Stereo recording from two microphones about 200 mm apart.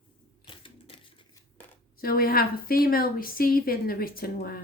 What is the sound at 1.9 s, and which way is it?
A woman's voice, 45° left (ahead or behind).